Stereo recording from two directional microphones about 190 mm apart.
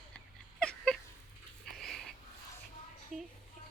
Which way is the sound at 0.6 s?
5° left (ahead or behind).